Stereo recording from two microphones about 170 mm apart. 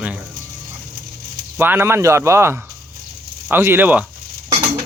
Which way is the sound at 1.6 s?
15° right (ahead or behind).